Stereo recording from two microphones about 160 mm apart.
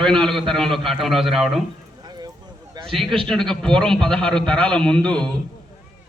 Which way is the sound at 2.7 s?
30° right (ahead or behind).